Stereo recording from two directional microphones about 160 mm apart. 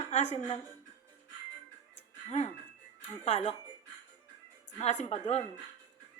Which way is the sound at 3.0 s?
40° left (ahead or behind).